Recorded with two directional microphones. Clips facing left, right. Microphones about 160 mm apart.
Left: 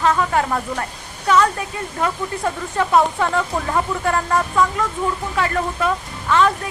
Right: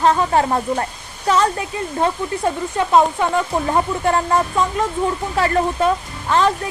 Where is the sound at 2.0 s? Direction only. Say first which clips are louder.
Right 2 dB; 30° right (ahead or behind).